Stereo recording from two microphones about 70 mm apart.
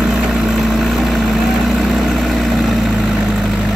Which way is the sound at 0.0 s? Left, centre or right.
Centre.